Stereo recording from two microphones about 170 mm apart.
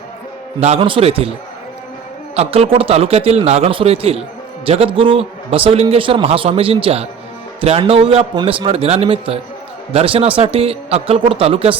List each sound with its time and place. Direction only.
0.6 s a man's voice: 35° right (ahead or behind)
2.3 s a man's voice: 40° right (ahead or behind)